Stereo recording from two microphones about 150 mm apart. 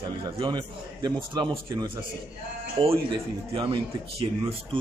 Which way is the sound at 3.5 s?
35° right (ahead or behind).